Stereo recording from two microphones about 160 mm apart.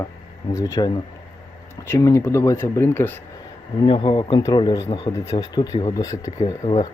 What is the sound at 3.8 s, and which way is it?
Speech, 30° left (ahead or behind).